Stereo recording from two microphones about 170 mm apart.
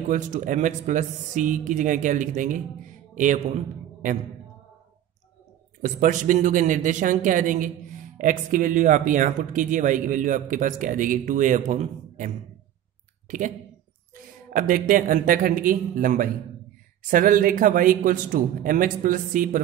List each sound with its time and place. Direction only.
0.1 s speech: 45° right (ahead or behind)
5.8 s speech: 50° right (ahead or behind)
14.1 s speech: 50° right (ahead or behind)